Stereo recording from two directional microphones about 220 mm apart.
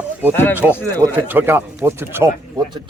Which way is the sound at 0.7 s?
10° left (ahead or behind).